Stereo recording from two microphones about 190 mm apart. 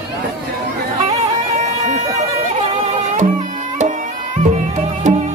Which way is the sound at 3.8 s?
40° right (ahead or behind).